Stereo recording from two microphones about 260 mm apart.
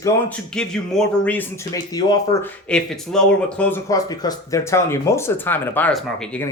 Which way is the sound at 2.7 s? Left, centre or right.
Centre.